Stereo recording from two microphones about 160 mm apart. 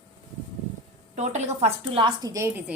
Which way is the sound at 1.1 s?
45° right (ahead or behind).